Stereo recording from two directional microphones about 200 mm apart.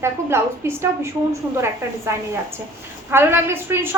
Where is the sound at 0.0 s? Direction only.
10° right (ahead or behind).